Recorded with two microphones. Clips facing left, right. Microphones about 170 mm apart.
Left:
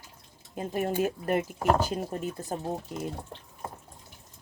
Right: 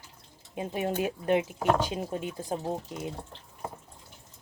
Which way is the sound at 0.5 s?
5° right (ahead or behind).